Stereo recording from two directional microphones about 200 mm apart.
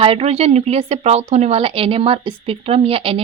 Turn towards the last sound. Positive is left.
turn(degrees=-30)  # may be behind; listen again after turning